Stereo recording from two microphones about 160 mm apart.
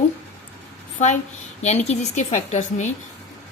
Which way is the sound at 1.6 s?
45° left (ahead or behind).